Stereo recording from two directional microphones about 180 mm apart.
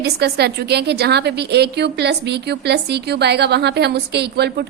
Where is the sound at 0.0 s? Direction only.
65° right (ahead or behind).